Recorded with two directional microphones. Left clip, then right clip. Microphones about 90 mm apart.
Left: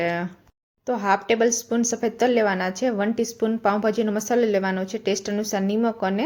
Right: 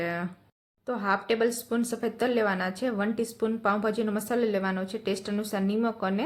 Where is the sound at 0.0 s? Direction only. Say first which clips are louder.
Left 7 dB; 35° left (ahead or behind).